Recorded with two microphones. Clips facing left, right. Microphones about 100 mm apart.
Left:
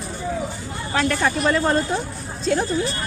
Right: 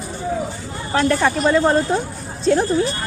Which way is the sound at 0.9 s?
40° right (ahead or behind).